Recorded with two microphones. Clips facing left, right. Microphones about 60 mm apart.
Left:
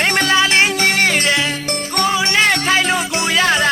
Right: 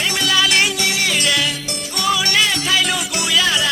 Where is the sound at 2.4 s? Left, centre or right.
Left.